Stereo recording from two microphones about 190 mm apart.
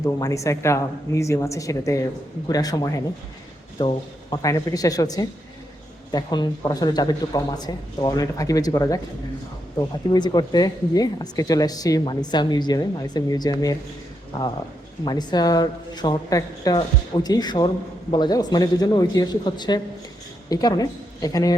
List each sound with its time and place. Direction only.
0.0 s speech: 15° left (ahead or behind)
10.1 s speech: 25° left (ahead or behind)
15.0 s a woman's voice: 20° left (ahead or behind)